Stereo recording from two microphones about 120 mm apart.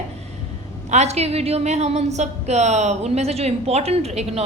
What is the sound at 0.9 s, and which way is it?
A woman's voice, 65° right (ahead or behind).